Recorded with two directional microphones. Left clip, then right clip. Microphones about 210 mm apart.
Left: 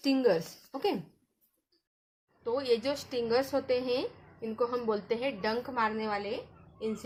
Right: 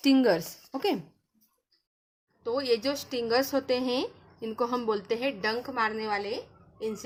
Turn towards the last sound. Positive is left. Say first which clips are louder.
# right 2 dB
turn(degrees=-20)  # may be behind; listen again after turning